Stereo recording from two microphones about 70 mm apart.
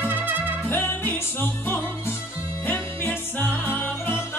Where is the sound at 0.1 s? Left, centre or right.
Right.